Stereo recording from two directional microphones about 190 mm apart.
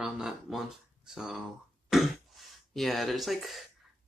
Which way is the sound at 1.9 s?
Centre (ahead or behind).